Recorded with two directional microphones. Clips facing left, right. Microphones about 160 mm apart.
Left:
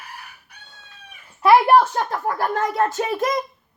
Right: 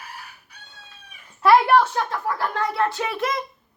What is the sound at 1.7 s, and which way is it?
A child's voice, 35° left (ahead or behind).